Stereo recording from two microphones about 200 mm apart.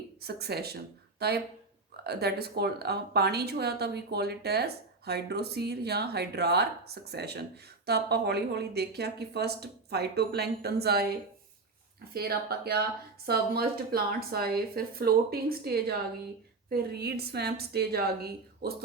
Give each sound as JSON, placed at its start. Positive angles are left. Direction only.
{"t": 0.2, "sound": "a woman's voice", "side_deg": -50}
{"t": 12.1, "sound": "a woman's voice", "side_deg": -50}